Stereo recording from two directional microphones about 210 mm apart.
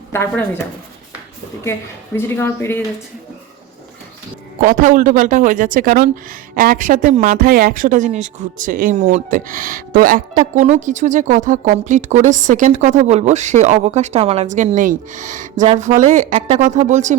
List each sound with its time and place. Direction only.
0.1 s speech: 10° left (ahead or behind)
2.1 s speech: 10° left (ahead or behind)
4.6 s speech: 40° right (ahead or behind)